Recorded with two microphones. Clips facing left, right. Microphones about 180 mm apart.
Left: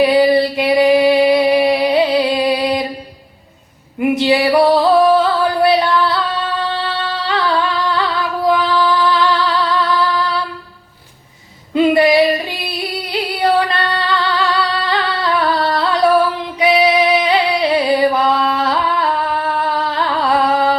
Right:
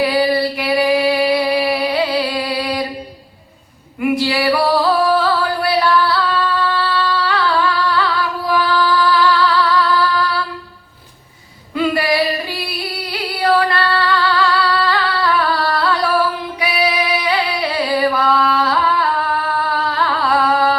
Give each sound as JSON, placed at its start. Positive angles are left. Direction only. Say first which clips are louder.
{"t": 0.0, "sound": "music", "louder": "left 4 dB", "side_deg": 20}
{"t": 4.0, "sound": "music", "louder": "left 3 dB", "side_deg": 20}
{"t": 11.7, "sound": "female singing", "louder": "left 6 dB", "side_deg": 20}
{"t": 20.3, "sound": "carnatic music", "louder": "left 1 dB", "side_deg": 20}